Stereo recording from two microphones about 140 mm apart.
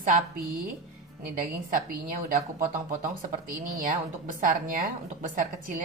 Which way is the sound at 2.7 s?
80° right.